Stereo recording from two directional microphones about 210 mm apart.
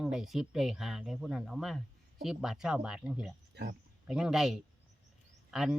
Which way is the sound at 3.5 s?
55° right (ahead or behind).